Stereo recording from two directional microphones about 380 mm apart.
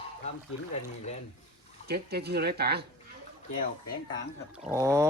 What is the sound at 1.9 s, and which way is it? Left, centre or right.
Speech, right.